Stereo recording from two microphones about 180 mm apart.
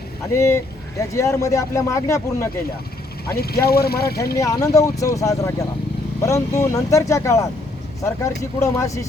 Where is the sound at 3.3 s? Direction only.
60° left (ahead or behind).